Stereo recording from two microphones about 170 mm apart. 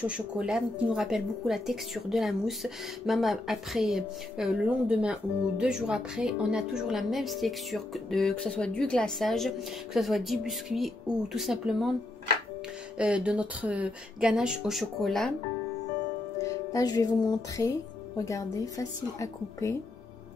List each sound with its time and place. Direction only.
0.0 s speech: 5° right (ahead or behind)
12.9 s speech: 5° right (ahead or behind)
16.3 s speech: 20° left (ahead or behind)